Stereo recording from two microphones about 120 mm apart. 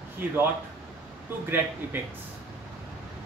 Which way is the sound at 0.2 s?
15° right (ahead or behind).